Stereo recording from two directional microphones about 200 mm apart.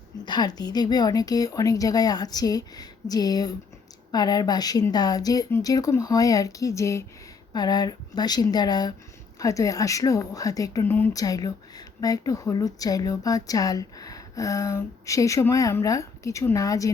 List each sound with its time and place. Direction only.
0.3 s speech: 20° left (ahead or behind)